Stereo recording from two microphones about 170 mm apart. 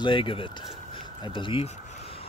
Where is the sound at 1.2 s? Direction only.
30° left (ahead or behind).